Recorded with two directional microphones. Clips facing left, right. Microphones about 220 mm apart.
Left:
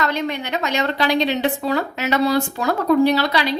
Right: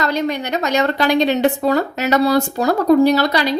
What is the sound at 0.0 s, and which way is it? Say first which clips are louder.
A woman's voice: right 3 dB; 40° right (ahead or behind).